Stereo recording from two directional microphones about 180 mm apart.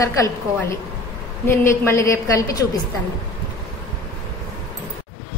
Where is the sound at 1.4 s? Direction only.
15° left (ahead or behind).